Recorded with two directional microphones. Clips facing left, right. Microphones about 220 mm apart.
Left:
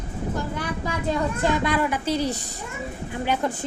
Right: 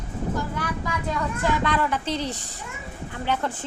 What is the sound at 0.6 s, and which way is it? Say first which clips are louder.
Speech: left 1 dB; 25° left (ahead or behind).